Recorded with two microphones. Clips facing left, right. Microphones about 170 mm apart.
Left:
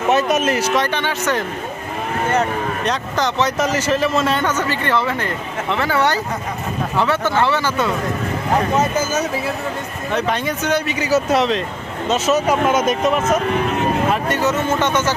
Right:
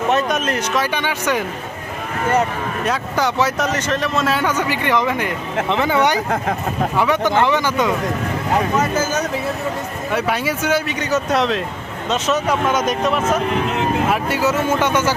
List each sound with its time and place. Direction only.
0.1 s speech: 5° left (ahead or behind)
0.9 s a man's voice: 10° right (ahead or behind)
2.8 s a man's voice: 10° right (ahead or behind)
3.6 s a man's voice: 5° left (ahead or behind); by 7.9 s 15° right (ahead or behind)
10.1 s a man's voice: 5° right (ahead or behind)
11.0 s speech: 5° left (ahead or behind)
14.1 s a man's voice: 10° right (ahead or behind)